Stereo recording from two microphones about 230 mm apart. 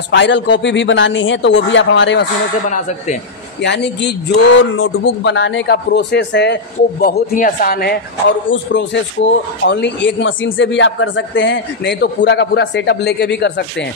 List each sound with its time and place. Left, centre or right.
0.1 s a man's voice: left
2.7 s speech: left
3.6 s a man's voice: left
8.5 s a man's voice: left